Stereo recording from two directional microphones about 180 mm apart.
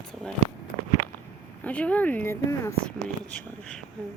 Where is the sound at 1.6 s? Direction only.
5° left (ahead or behind).